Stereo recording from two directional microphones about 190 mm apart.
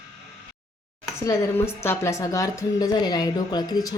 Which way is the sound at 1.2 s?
15° left (ahead or behind).